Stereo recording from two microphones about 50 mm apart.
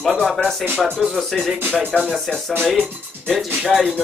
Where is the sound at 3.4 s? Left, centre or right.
Centre.